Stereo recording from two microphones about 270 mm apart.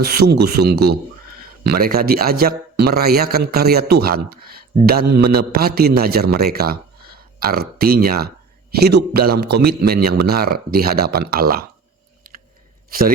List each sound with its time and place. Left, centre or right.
0.0 s a man's voice: right